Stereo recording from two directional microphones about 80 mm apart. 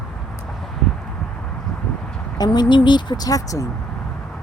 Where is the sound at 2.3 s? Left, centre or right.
Left.